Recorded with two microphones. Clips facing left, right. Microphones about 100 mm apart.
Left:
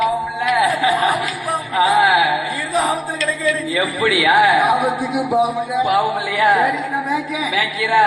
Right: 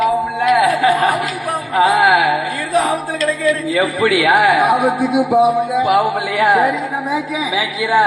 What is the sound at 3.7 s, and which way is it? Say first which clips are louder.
A man's voice: right 3 dB; 50° right (ahead or behind).